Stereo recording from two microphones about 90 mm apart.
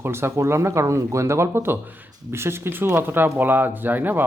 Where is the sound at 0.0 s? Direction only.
30° right (ahead or behind).